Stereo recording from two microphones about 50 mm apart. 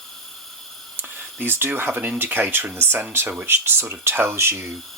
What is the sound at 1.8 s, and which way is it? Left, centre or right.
Speech, right.